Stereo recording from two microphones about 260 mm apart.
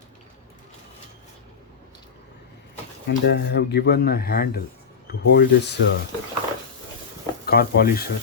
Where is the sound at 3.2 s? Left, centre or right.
Left.